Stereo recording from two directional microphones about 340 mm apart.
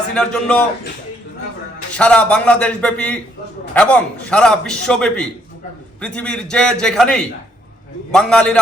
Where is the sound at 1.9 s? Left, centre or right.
Centre.